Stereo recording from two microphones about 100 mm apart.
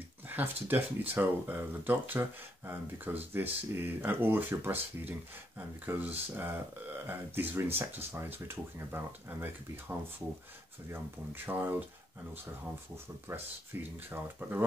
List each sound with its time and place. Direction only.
0.3 s speech: 20° right (ahead or behind)
13.3 s speech: 25° right (ahead or behind)